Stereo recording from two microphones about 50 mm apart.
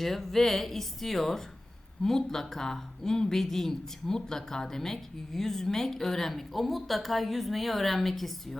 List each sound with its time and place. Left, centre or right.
0.0 s a woman's voice: centre